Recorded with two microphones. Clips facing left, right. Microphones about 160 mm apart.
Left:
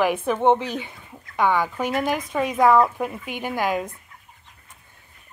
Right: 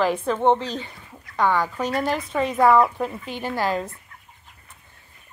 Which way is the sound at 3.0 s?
10° left (ahead or behind).